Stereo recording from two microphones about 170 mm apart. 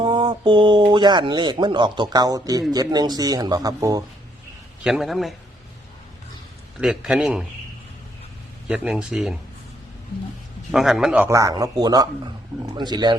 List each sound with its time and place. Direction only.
0.0 s speech: 30° right (ahead or behind)
4.8 s speech: 5° right (ahead or behind)
6.7 s speech: 5° right (ahead or behind)
8.6 s speech: 5° right (ahead or behind)
10.7 s a man's voice: centre (ahead or behind); by 13.1 s 25° right (ahead or behind)